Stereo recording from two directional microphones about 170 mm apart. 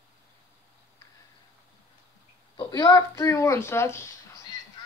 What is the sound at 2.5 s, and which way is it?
Speech, 25° left (ahead or behind).